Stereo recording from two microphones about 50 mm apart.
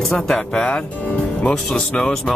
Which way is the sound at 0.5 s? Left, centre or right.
Left.